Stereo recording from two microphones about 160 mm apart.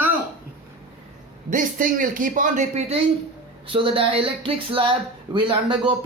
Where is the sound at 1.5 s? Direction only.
60° right (ahead or behind).